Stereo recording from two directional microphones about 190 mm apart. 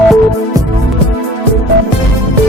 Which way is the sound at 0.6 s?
20° right (ahead or behind).